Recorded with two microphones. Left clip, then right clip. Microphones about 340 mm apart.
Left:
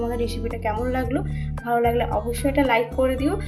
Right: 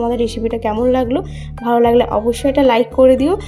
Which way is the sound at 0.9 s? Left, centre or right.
Centre.